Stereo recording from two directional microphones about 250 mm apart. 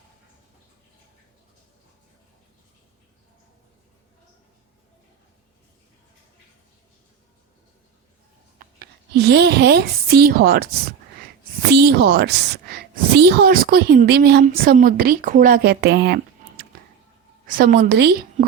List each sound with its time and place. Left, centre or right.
8.5 s a woman's voice: right
11.7 s a woman's voice: right
17.4 s a woman's voice: right